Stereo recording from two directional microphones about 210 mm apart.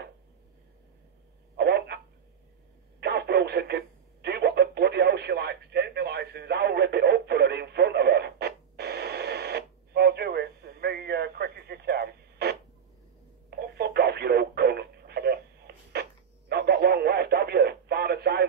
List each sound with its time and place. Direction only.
1.6 s telephone: 50° right (ahead or behind)
3.0 s radio: 50° right (ahead or behind)
13.7 s radio: 50° right (ahead or behind)